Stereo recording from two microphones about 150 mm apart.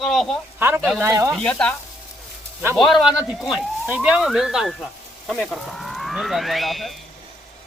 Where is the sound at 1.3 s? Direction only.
5° left (ahead or behind).